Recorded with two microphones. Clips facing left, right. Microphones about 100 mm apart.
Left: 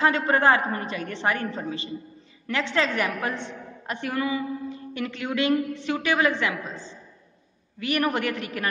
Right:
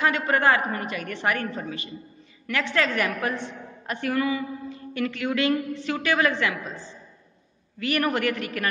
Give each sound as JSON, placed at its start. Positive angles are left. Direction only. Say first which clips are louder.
{"t": 0.0, "sound": "a woman's voice", "louder": "left 1 dB", "side_deg": 30}